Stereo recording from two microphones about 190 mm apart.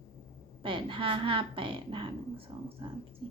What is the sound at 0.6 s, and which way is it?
A woman's voice, 25° right (ahead or behind).